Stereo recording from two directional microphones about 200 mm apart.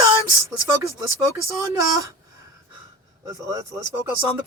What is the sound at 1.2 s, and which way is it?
Speech, 15° right (ahead or behind).